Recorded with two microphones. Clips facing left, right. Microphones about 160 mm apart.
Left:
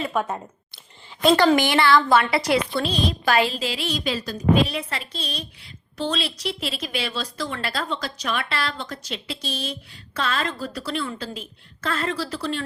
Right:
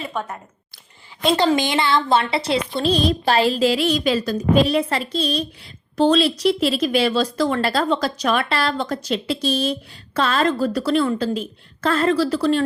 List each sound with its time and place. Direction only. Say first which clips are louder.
1.4 s a woman's voice: even; 20° right (ahead or behind); by 4.4 s 50° right (ahead or behind)
4.5 s a woman's voice: right 8 dB; 40° right (ahead or behind)